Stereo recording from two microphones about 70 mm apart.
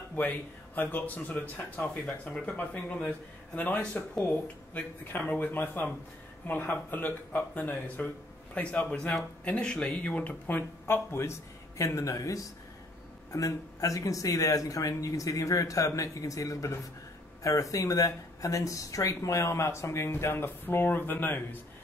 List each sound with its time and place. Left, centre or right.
0.1 s speech: left
10.9 s speech: left
11.8 s speech: left